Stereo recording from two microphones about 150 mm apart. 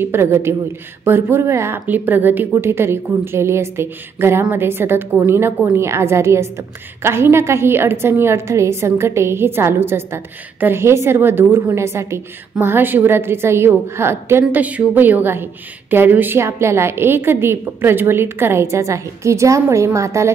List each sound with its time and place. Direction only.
0.0 s a woman's voice: 15° right (ahead or behind)